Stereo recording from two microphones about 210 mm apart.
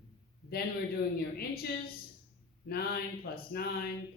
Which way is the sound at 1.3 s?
45° left (ahead or behind).